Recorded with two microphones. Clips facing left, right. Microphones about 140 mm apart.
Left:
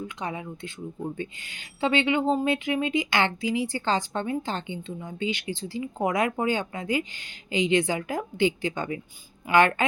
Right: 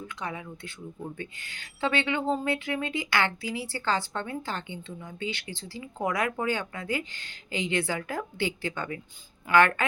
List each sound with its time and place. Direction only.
0.2 s speech: 20° left (ahead or behind)